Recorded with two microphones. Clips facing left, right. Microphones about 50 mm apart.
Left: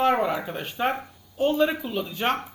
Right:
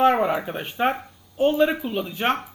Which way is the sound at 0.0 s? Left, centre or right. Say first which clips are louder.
Right 3 dB; right.